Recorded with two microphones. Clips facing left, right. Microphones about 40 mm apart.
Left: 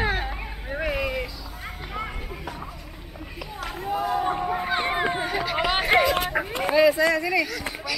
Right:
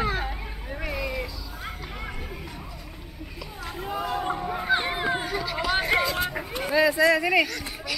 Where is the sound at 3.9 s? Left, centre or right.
Centre; by 6.3 s left.